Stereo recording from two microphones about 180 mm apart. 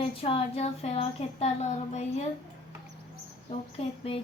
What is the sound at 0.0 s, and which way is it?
A woman's voice, 30° left (ahead or behind).